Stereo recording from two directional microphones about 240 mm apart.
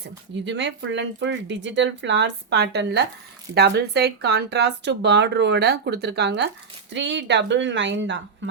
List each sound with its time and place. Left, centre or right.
0.4 s speech: right